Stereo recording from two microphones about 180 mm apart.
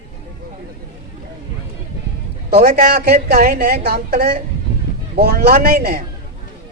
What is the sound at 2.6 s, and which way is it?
A woman's voice, 60° right (ahead or behind).